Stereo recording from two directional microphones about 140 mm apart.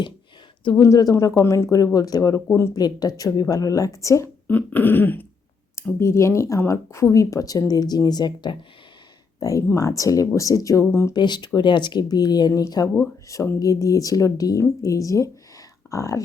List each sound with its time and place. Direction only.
0.8 s speech: 25° left (ahead or behind)
11.2 s speech: 30° left (ahead or behind)